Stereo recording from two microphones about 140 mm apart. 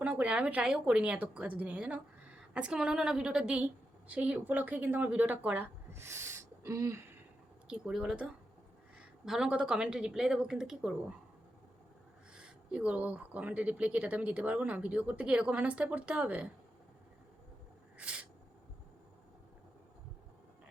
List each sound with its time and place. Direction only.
0.0 s speech: 10° right (ahead or behind)
7.7 s speech: 5° right (ahead or behind)
12.3 s speech: 5° right (ahead or behind)
17.9 s a sound: 10° right (ahead or behind)